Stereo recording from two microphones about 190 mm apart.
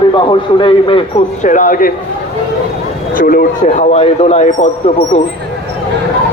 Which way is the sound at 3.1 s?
50° left (ahead or behind).